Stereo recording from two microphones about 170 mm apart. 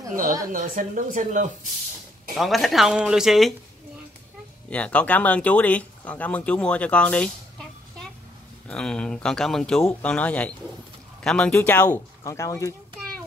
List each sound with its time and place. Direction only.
0.5 s speech: 50° right (ahead or behind)
2.3 s speech: centre (ahead or behind)
4.6 s speech: 5° left (ahead or behind)
8.6 s speech: 5° left (ahead or behind)